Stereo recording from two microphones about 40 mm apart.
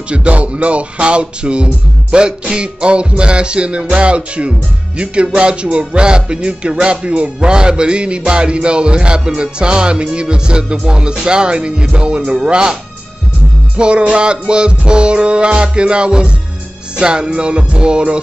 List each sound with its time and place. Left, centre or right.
0.1 s speech: right
13.7 s speech: right